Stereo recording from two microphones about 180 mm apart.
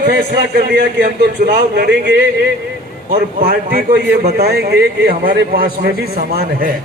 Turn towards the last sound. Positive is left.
turn(degrees=-60)  # may be behind; listen again after turning